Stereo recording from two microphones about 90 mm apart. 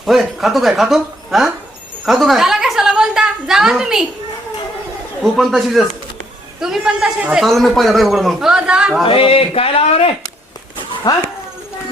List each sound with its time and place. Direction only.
0.0 s speech: centre (ahead or behind)
2.0 s a sound: centre (ahead or behind)
5.2 s a man's voice: centre (ahead or behind)
7.4 s a man's voice: 5° left (ahead or behind)
9.0 s speech: 85° left
11.1 s speech: 50° left (ahead or behind)